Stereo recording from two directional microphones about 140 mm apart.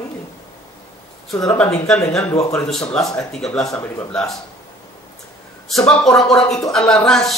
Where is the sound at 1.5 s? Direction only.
10° left (ahead or behind).